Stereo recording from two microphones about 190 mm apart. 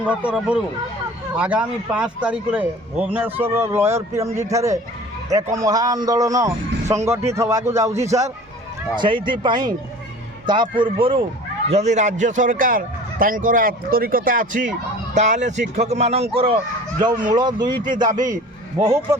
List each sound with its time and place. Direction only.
0.0 s a man's voice: 5° right (ahead or behind); by 17.7 s 20° right (ahead or behind)
17.8 s a man's voice: 45° right (ahead or behind)